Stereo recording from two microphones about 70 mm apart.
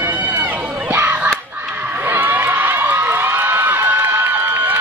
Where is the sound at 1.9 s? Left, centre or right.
Right.